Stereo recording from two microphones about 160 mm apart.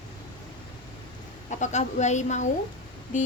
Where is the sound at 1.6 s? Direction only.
45° left (ahead or behind).